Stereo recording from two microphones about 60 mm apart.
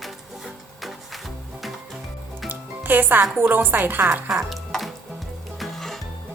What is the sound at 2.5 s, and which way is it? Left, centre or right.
Music, right.